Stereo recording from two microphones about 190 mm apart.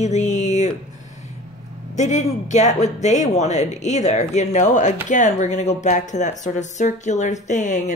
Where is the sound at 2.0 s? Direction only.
40° left (ahead or behind).